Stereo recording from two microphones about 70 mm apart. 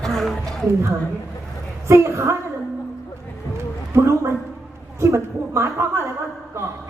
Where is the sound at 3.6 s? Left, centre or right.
Right.